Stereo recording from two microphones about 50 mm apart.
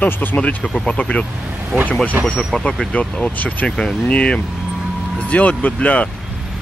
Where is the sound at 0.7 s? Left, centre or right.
Centre.